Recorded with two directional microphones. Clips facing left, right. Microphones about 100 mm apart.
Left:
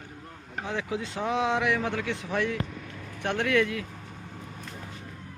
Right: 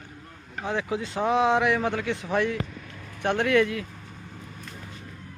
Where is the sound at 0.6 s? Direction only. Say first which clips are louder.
Right 4 dB; 40° right (ahead or behind).